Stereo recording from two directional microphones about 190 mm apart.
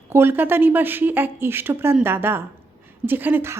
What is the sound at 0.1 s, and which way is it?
A woman's voice, 10° right (ahead or behind).